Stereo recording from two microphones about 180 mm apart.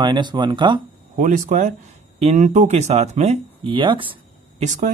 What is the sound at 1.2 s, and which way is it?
Speech, 45° right (ahead or behind).